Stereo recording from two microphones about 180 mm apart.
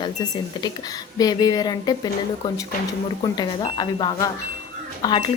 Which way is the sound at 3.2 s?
25° left (ahead or behind).